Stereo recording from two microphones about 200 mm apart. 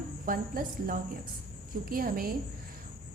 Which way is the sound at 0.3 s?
45° right (ahead or behind).